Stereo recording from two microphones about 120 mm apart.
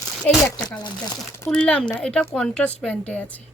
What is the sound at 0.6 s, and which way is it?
Speech, 35° left (ahead or behind).